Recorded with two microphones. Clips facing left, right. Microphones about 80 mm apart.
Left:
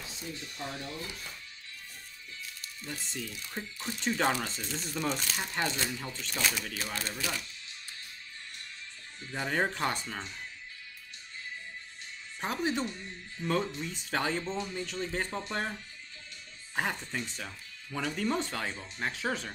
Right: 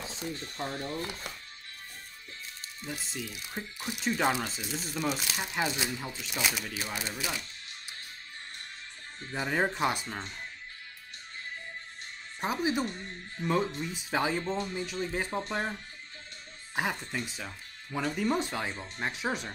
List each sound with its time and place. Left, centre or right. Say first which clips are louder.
0.4 s speech: right 4 dB; right
2.8 s speech: right 1 dB; centre
9.3 s speech: right 1 dB; centre
12.4 s speech: right 2 dB; centre
12.8 s speech: right 1 dB; right
13.4 s speech: right 2 dB; centre